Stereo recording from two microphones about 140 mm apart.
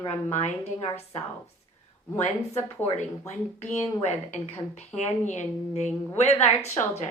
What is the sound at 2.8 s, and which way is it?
Speech, 55° left (ahead or behind).